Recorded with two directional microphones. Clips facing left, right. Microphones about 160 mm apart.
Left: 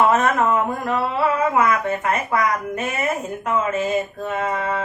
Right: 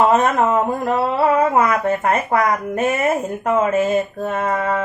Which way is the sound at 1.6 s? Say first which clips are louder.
Right 3 dB; 40° right (ahead or behind).